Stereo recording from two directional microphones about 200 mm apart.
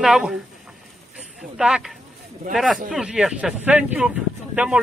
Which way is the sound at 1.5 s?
5° right (ahead or behind).